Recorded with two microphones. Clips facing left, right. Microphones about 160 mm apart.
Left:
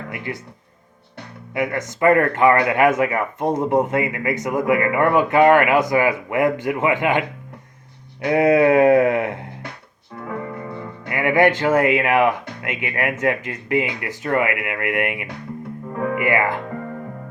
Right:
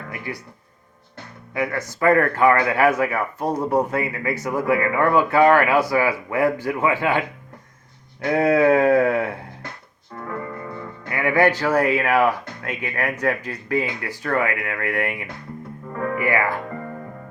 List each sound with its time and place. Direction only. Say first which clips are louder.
1.5 s speech: left 2 dB; 20° left (ahead or behind)
11.1 s speech: left 2 dB; 20° left (ahead or behind)